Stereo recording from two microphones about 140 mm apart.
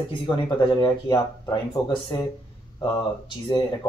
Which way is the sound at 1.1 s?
30° left (ahead or behind).